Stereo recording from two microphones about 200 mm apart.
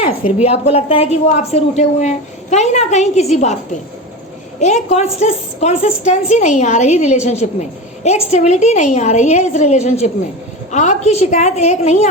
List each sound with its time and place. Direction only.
0.4 s a woman's voice: 30° left (ahead or behind)
4.6 s a woman's voice: 35° left (ahead or behind)